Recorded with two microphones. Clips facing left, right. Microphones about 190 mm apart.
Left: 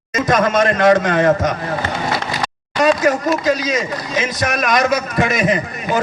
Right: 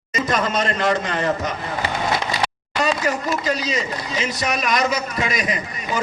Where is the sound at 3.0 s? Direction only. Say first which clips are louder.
Left 6 dB; 45° left (ahead or behind).